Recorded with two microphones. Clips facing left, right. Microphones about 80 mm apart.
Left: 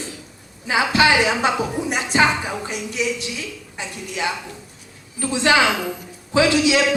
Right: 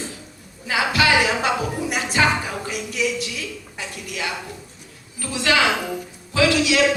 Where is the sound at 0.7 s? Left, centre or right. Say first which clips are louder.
Left 2 dB; left.